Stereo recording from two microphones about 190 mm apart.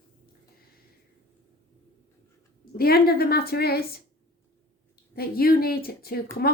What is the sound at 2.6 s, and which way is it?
Speech, 50° left (ahead or behind).